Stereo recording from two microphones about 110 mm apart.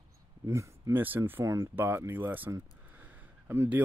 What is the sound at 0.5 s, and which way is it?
Speech, 25° right (ahead or behind).